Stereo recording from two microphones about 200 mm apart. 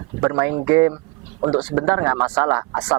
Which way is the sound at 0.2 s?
15° right (ahead or behind).